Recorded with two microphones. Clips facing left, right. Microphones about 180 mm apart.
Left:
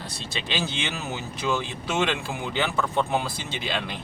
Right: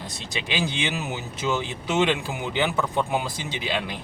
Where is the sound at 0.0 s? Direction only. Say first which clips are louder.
Right 1 dB; 20° right (ahead or behind).